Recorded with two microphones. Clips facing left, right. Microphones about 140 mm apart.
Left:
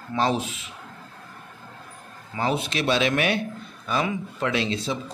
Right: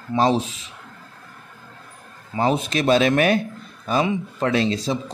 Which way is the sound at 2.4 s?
40° right (ahead or behind).